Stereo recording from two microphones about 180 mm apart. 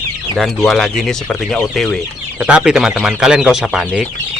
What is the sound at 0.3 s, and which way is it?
Speech, centre (ahead or behind).